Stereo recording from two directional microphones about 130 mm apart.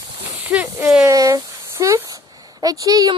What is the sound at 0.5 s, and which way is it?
Speech, 10° right (ahead or behind).